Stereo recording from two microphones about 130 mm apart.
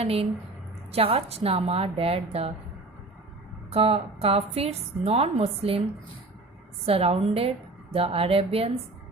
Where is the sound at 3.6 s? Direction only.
50° right (ahead or behind).